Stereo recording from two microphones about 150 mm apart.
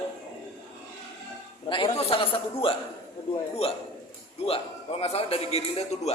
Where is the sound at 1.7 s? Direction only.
35° left (ahead or behind).